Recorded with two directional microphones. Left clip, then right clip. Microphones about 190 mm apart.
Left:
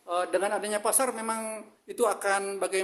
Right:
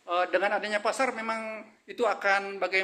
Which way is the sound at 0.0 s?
25° left (ahead or behind).